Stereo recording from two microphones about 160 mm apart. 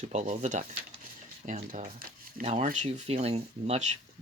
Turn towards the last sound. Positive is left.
turn(degrees=-45)  # may be behind; listen again after turning